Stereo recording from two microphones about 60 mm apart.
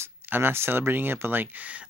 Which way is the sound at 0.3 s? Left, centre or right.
Right.